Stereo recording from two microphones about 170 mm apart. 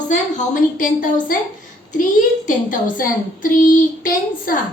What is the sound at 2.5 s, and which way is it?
A woman's voice, 50° left (ahead or behind).